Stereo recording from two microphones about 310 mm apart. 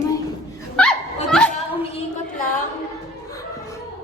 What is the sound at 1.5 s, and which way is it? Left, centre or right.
Speech, centre.